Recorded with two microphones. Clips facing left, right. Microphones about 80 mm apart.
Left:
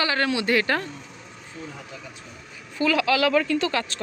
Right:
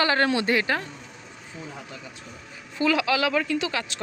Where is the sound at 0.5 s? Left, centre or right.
Centre.